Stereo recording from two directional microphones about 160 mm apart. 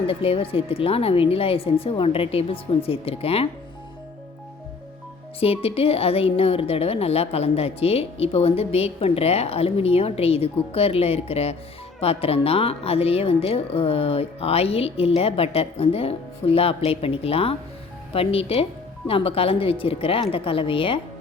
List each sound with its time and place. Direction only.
0.1 s a woman's voice: 35° left (ahead or behind)
5.4 s a woman's voice: 35° left (ahead or behind)